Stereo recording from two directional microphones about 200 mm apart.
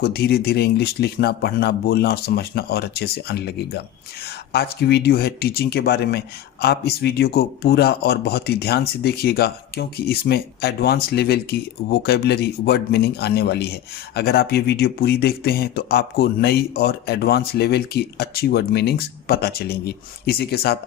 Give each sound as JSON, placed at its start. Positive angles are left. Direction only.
{"t": 0.0, "sound": "speech", "side_deg": 50}